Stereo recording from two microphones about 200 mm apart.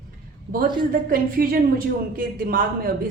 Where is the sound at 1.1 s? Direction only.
45° right (ahead or behind).